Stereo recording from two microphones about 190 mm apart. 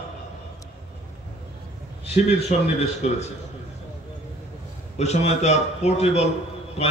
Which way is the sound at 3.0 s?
35° left (ahead or behind).